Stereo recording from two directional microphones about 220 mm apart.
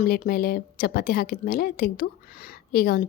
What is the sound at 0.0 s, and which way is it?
A woman's voice, 40° left (ahead or behind).